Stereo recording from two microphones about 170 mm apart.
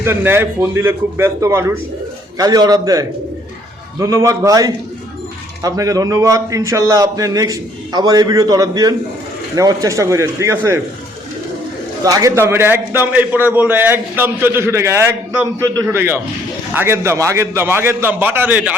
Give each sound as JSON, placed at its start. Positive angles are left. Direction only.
{"t": 0.0, "sound": "a man's voice", "side_deg": -15}
{"t": 12.0, "sound": "a man's voice", "side_deg": -20}